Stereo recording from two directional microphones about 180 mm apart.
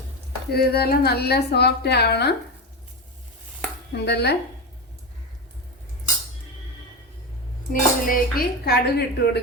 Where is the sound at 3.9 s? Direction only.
65° left (ahead or behind).